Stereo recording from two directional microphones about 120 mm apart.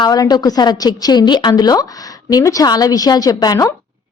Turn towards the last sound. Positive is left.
turn(degrees=30)  # may be behind; listen again after turning